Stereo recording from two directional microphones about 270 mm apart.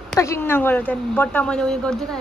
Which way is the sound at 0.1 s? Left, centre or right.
Centre.